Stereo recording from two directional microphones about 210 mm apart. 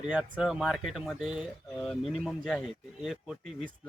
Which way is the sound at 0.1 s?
5° right (ahead or behind).